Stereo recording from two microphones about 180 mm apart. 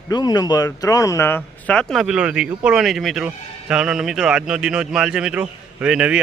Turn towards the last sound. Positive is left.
turn(degrees=-5)  # may be behind; listen again after turning